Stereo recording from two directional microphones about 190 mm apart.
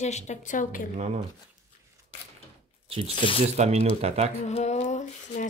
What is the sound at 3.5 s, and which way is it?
Speech, 35° right (ahead or behind).